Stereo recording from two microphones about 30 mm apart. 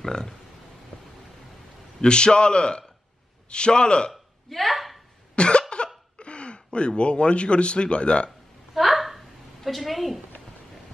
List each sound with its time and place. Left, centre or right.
0.0 s speech: centre
2.0 s a man's voice: left
4.1 s burping: centre
5.3 s cough: left
6.1 s speech: left
8.7 s a sound: centre
9.7 s a woman's voice: centre